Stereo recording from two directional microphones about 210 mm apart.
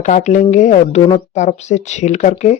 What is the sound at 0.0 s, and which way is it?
Speech, 35° left (ahead or behind).